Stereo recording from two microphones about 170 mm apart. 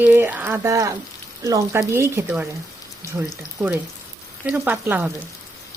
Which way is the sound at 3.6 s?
5° right (ahead or behind).